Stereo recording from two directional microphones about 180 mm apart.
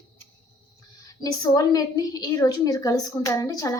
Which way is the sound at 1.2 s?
20° left (ahead or behind).